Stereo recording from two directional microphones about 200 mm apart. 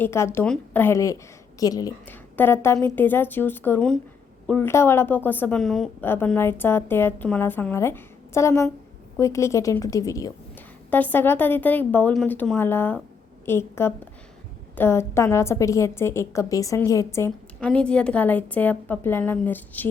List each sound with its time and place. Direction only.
0.0 s a woman's voice: 15° left (ahead or behind)